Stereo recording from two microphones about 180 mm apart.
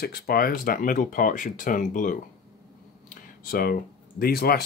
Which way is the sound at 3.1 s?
55° left (ahead or behind).